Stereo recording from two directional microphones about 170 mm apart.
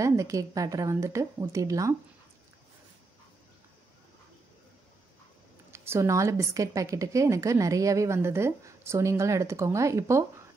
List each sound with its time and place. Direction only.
0.0 s a woman's voice: 20° right (ahead or behind)
5.7 s a woman's voice: 15° right (ahead or behind)